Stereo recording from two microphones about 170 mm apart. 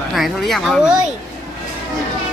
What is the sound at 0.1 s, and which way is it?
Speech, centre (ahead or behind).